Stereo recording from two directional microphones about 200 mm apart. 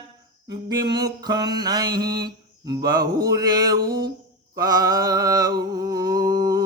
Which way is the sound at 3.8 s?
50° right (ahead or behind).